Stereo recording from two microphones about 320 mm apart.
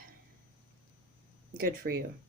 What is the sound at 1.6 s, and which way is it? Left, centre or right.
Speech, right.